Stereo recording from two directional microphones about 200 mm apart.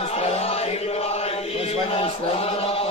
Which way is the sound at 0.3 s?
30° left (ahead or behind).